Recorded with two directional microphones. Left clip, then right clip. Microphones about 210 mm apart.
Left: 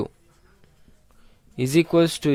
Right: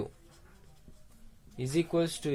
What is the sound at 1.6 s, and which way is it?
Speech, 55° left (ahead or behind).